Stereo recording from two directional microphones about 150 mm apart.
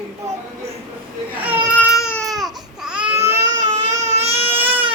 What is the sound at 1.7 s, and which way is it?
Baby cry, 20° left (ahead or behind).